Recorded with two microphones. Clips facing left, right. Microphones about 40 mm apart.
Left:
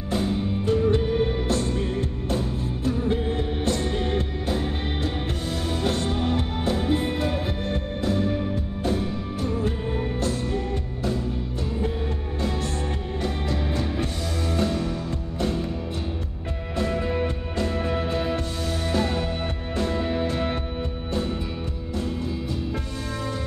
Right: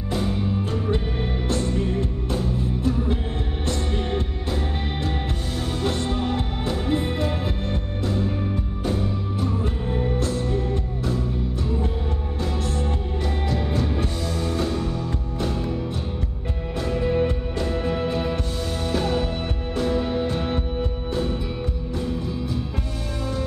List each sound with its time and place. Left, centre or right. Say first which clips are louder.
0.7 s music: left 4 dB; centre
13.2 s music: right 1 dB; centre
16.7 s music: right 2 dB; centre
18.6 s music: right 1 dB; centre
20.3 s music: right 1 dB; centre